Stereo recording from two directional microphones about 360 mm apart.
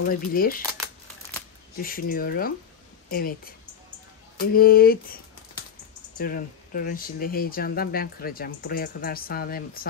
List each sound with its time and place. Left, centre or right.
0.1 s speech: left
1.8 s speech: left